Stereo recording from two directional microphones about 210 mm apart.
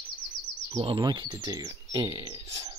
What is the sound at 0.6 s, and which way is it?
Speech, 25° right (ahead or behind).